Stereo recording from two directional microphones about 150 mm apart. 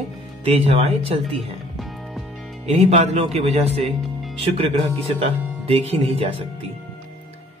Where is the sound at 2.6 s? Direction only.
45° right (ahead or behind).